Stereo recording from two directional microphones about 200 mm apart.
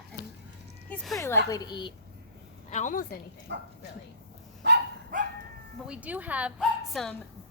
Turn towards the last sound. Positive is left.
turn(degrees=0)  # may be behind; listen again after turning